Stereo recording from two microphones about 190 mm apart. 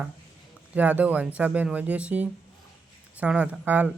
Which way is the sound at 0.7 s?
10° right (ahead or behind).